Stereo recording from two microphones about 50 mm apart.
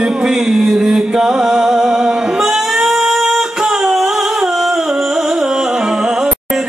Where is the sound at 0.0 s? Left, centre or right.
Centre.